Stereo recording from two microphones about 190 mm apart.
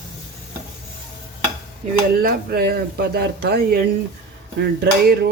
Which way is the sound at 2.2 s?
50° right (ahead or behind).